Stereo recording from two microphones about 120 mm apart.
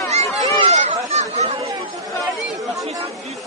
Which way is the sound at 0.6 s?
65° right (ahead or behind).